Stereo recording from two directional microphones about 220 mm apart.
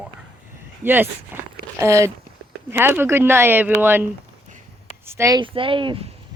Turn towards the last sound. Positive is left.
turn(degrees=-25)  # may be behind; listen again after turning